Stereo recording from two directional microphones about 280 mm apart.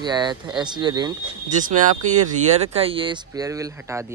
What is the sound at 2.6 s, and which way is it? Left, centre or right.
Speech, right.